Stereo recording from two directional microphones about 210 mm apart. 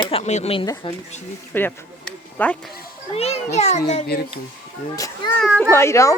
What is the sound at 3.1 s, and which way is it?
Speech, 30° left (ahead or behind).